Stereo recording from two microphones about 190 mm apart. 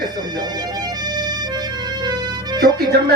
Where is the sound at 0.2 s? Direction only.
20° right (ahead or behind).